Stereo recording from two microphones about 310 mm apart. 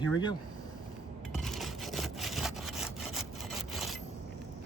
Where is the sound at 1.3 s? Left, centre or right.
Centre.